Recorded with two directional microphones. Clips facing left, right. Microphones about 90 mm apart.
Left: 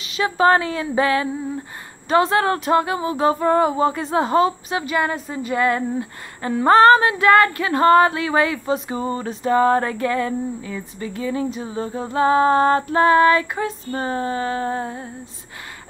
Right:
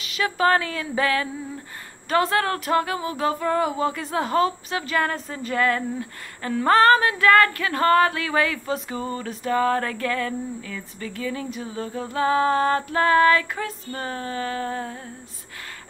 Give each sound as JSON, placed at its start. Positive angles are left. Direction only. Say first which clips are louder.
{"t": 0.0, "sound": "speech", "louder": "left 4 dB", "side_deg": 25}